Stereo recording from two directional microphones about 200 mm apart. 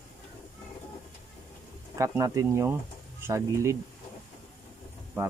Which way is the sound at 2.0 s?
15° right (ahead or behind).